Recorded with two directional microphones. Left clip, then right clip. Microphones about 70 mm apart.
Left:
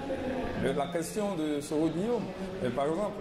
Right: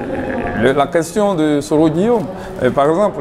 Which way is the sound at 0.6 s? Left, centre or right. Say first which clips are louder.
Right 19 dB; left.